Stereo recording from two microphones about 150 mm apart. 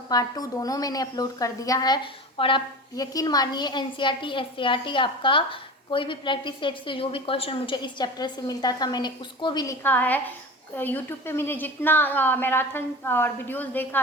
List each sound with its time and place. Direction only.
0.1 s a woman's voice: 25° left (ahead or behind)
9.8 s a woman's voice: 10° left (ahead or behind)